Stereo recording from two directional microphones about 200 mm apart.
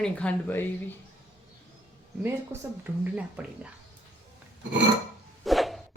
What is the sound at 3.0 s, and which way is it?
Speech, 5° right (ahead or behind).